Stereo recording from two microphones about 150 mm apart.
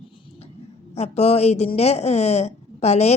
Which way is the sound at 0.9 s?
45° left (ahead or behind).